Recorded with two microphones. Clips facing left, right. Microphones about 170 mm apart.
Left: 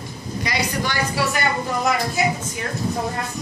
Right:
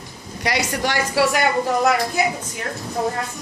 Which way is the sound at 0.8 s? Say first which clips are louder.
Right 4 dB; 85° right.